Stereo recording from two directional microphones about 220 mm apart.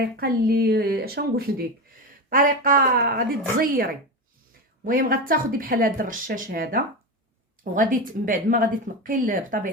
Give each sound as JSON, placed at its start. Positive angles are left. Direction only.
{"t": 0.0, "sound": "speech", "side_deg": -45}